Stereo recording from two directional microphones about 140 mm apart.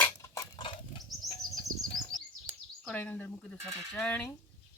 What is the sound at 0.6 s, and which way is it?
Bird flight, 35° left (ahead or behind).